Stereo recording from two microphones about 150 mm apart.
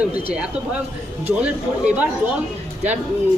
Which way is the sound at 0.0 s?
10° right (ahead or behind).